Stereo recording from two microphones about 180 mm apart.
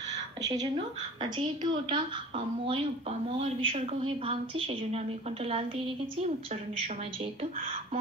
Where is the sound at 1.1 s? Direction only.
25° right (ahead or behind).